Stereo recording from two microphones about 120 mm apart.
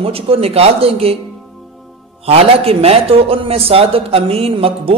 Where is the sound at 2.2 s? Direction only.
55° right (ahead or behind).